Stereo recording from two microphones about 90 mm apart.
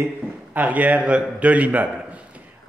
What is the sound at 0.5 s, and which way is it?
A man's voice, 15° right (ahead or behind).